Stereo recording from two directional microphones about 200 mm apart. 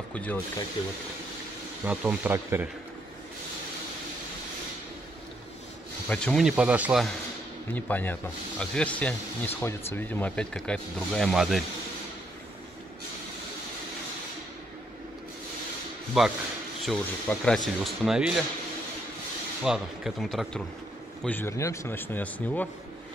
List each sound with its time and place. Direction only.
0.1 s speech: 5° left (ahead or behind)
1.9 s speech: 10° right (ahead or behind)
6.0 s speech: 5° left (ahead or behind)
7.7 s speech: 10° left (ahead or behind)
16.1 s speech: centre (ahead or behind)
19.6 s speech: 5° right (ahead or behind)